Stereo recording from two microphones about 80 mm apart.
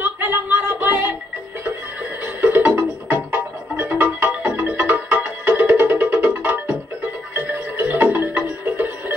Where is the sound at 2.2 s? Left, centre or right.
Right.